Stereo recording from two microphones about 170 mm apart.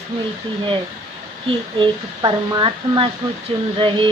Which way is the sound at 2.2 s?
25° right (ahead or behind).